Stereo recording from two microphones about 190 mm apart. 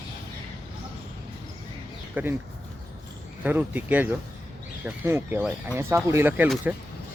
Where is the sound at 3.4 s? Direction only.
10° right (ahead or behind).